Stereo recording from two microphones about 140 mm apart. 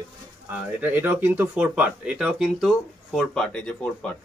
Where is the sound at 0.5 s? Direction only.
10° right (ahead or behind); by 4.1 s 5° left (ahead or behind).